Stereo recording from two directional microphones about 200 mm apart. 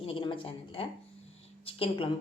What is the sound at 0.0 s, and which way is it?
A woman's voice, 25° left (ahead or behind).